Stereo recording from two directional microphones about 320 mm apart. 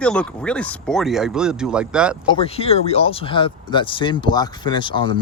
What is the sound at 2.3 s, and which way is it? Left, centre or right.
Speech, centre.